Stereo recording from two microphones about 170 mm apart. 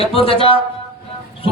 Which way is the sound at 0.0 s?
35° left (ahead or behind).